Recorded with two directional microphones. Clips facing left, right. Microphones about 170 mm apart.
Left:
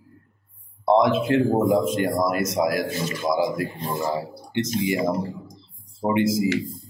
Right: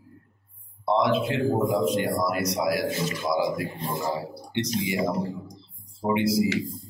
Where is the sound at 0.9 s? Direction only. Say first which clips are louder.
Left 5 dB; 45° left (ahead or behind).